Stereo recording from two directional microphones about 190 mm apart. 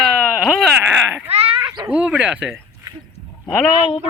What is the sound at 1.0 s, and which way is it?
Speech, 10° right (ahead or behind).